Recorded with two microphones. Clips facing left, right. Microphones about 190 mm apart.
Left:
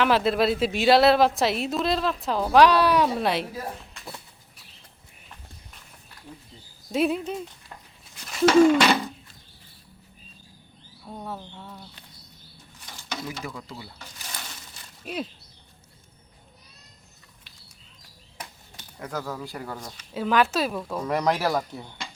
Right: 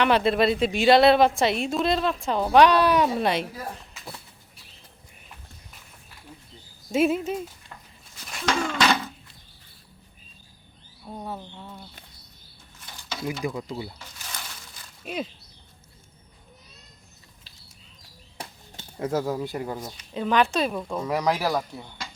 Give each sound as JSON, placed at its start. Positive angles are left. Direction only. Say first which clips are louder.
{"t": 0.0, "sound": "a woman's voice", "louder": "right 1 dB", "side_deg": 0}
{"t": 6.9, "sound": "a woman's voice", "louder": "right 2 dB", "side_deg": 0}
{"t": 8.2, "sound": "a sound", "louder": "left 11 dB", "side_deg": 0}
{"t": 11.0, "sound": "speech", "louder": "right 1 dB", "side_deg": -10}
{"t": 11.3, "sound": "a woman's voice", "louder": "right 1 dB", "side_deg": 0}
{"t": 13.4, "sound": "speech", "louder": "right 7 dB", "side_deg": -20}
{"t": 15.0, "sound": "a woman's voice", "louder": "right 1 dB", "side_deg": 0}
{"t": 18.3, "sound": "a sound", "louder": "right 2 dB", "side_deg": -25}
{"t": 20.1, "sound": "a woman's voice", "louder": "even", "side_deg": 5}